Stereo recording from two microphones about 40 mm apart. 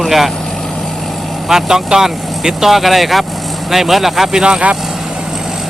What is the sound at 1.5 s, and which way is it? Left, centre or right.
Speech, centre.